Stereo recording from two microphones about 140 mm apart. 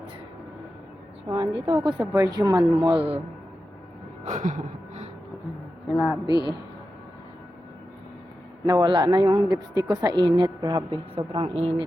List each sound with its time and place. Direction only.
1.3 s a woman's voice: 40° right (ahead or behind)
1.8 s speech: 25° right (ahead or behind); by 3.2 s 40° right (ahead or behind)
4.3 s gasp: 60° right (ahead or behind)
5.9 s speech: 5° right (ahead or behind)
6.2 s a woman's voice: 30° left (ahead or behind)
8.6 s a woman's voice: 30° right (ahead or behind)
11.1 s speech: 40° right (ahead or behind)